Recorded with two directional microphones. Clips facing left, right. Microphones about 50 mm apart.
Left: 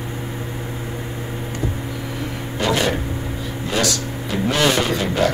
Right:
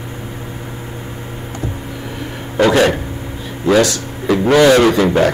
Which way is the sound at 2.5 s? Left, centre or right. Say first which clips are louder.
Right 8 dB; right.